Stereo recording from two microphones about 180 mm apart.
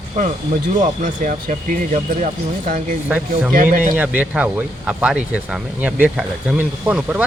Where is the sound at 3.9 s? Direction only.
10° right (ahead or behind).